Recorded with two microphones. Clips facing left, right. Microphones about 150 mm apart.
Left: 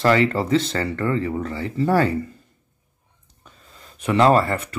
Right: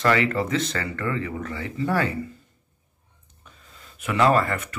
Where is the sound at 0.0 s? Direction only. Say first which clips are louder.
Left 3 dB; 30° left (ahead or behind).